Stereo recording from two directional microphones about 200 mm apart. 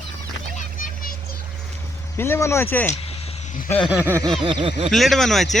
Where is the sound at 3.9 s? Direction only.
10° right (ahead or behind).